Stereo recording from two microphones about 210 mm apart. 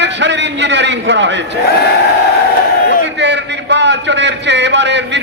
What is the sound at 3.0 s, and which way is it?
A man's voice, 55° right (ahead or behind).